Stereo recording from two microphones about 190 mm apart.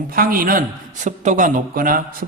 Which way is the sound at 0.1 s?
50° right (ahead or behind).